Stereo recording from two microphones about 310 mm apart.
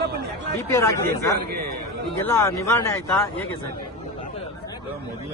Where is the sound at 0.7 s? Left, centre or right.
Centre.